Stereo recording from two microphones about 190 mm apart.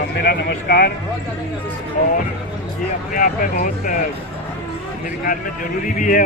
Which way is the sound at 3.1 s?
45° left (ahead or behind).